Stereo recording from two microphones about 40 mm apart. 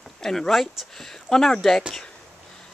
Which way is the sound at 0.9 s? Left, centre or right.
Centre.